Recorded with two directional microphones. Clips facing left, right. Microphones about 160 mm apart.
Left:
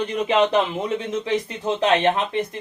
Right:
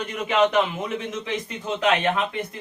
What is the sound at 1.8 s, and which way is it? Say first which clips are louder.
Speech: left 2 dB; 30° left (ahead or behind).